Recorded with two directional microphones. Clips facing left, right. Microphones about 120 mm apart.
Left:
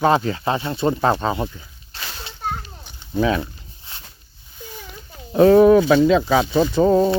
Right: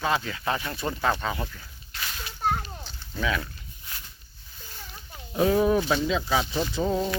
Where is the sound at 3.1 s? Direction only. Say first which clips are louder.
Left 9 dB; 30° left (ahead or behind).